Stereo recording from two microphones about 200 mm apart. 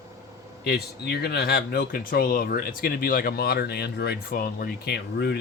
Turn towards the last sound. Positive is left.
turn(degrees=55)  # may be behind; listen again after turning